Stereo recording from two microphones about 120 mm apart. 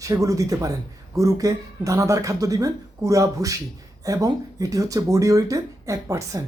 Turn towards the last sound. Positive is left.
turn(degrees=-25)  # may be behind; listen again after turning